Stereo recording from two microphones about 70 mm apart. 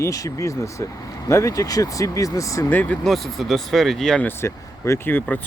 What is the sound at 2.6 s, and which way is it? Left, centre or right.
Speech, left.